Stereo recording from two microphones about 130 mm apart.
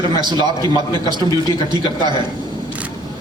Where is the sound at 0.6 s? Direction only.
25° left (ahead or behind).